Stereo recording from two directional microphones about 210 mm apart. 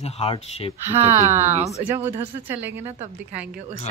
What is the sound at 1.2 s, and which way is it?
Speech, 10° right (ahead or behind).